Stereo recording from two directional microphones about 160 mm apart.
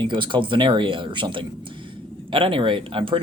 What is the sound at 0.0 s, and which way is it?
Speech, 30° right (ahead or behind).